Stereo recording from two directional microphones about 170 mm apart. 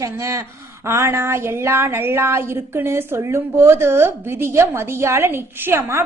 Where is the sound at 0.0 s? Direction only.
15° right (ahead or behind).